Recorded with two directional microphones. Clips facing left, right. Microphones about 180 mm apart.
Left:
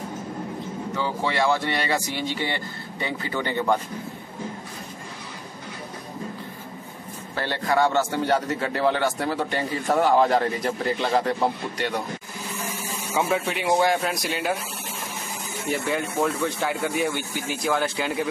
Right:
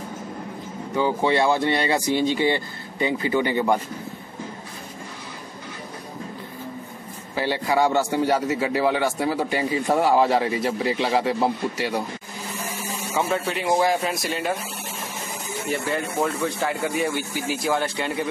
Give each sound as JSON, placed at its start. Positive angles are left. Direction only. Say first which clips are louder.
{"t": 0.9, "sound": "a man's voice", "louder": "right 6 dB", "side_deg": -15}
{"t": 7.3, "sound": "a man's voice", "louder": "right 1 dB", "side_deg": -10}
{"t": 13.1, "sound": "speech", "louder": "even", "side_deg": 5}
{"t": 15.7, "sound": "speech", "louder": "even", "side_deg": 0}